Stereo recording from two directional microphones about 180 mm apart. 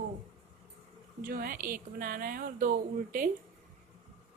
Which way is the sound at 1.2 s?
55° right (ahead or behind).